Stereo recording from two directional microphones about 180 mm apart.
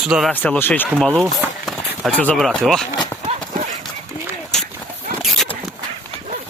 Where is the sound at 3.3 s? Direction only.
40° right (ahead or behind).